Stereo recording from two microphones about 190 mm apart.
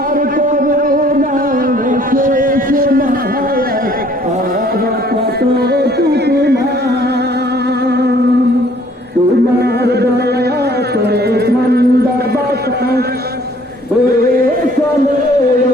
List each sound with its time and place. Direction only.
0.3 s music: 45° right (ahead or behind)
5.4 s music: 55° right (ahead or behind)
7.9 s music: 60° right (ahead or behind)
9.6 s music: 60° right (ahead or behind)